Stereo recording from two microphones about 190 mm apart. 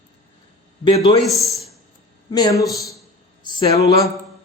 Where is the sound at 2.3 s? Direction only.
20° left (ahead or behind).